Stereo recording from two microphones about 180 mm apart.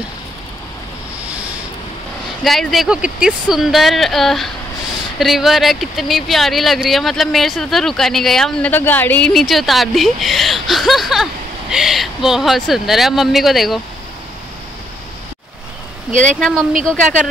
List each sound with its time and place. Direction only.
1.2 s a sound: 10° right (ahead or behind)
2.4 s speech: centre (ahead or behind)
16.1 s speech: 40° right (ahead or behind)
16.3 s speech: 5° left (ahead or behind)